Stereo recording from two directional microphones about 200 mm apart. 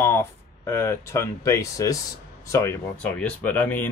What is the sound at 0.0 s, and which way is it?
Speech, 15° left (ahead or behind).